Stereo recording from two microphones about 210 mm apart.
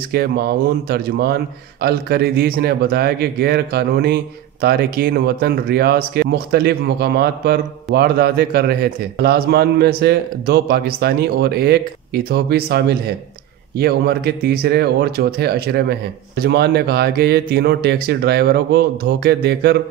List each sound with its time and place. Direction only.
0.1 s a man's voice: 45° right (ahead or behind)